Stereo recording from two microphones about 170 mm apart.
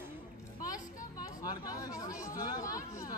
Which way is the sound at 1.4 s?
20° left (ahead or behind).